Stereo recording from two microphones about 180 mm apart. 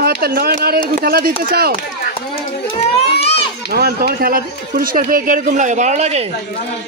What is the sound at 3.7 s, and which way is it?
Speech, 55° right (ahead or behind).